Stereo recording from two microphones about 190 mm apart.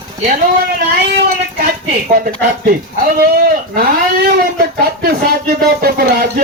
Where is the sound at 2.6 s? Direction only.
50° right (ahead or behind).